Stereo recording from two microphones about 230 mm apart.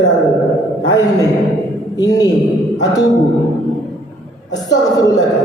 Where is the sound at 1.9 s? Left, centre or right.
Centre.